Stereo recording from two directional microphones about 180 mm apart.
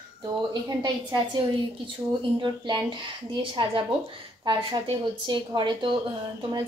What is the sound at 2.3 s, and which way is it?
A woman's voice, 25° right (ahead or behind).